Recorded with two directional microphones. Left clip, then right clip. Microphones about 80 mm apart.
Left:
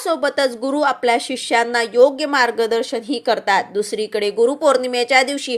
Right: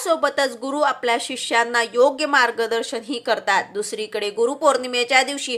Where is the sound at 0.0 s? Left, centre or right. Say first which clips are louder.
Left 2 dB; left.